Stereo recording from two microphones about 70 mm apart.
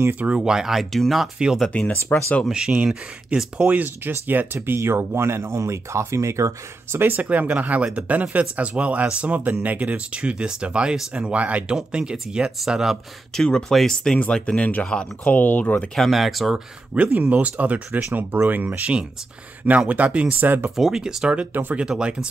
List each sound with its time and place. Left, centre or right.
0.1 s speech: centre
1.7 s speech: centre
2.5 s speech: centre; by 7.0 s right
7.0 s speech: right; by 13.0 s centre
13.3 s speech: centre
15.9 s speech: centre
16.9 s speech: right
20.7 s speech: centre